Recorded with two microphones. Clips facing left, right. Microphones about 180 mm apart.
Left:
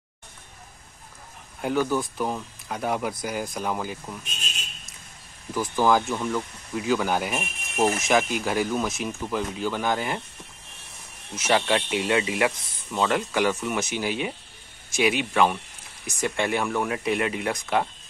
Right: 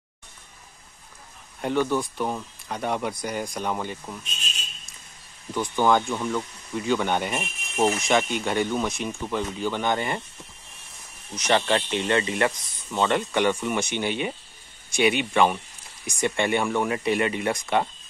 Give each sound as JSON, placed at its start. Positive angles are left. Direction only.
{"t": 1.6, "sound": "speech", "side_deg": 5}
{"t": 5.5, "sound": "speech", "side_deg": 5}
{"t": 11.3, "sound": "speech", "side_deg": 5}